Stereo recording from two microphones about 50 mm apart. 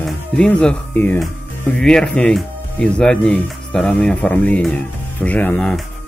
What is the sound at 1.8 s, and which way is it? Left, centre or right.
Speech, centre.